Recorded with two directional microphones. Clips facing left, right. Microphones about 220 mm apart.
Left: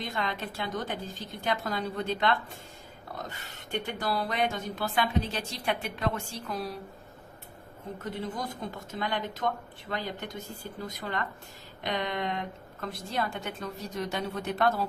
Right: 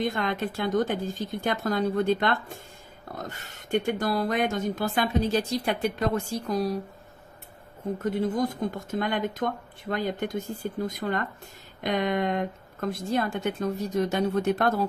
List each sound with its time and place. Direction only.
0.0 s speech: 50° right (ahead or behind)
8.0 s speech: 45° right (ahead or behind)